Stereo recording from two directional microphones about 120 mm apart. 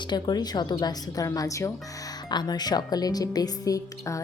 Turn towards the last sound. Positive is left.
turn(degrees=30)  # may be behind; listen again after turning